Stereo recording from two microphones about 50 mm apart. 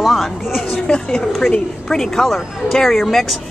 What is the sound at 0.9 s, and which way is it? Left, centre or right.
A woman's voice, centre.